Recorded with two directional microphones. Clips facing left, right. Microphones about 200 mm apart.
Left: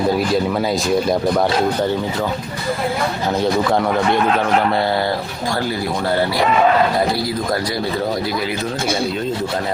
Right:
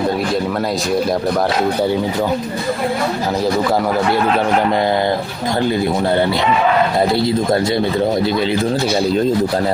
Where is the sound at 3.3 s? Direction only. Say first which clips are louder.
Even; centre (ahead or behind); by 8.6 s 25° right (ahead or behind).